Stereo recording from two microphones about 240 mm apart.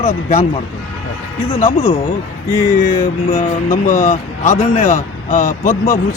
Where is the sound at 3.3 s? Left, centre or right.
Left.